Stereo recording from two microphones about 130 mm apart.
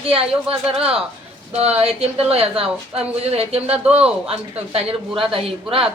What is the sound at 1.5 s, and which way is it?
A woman's voice, 55° right (ahead or behind).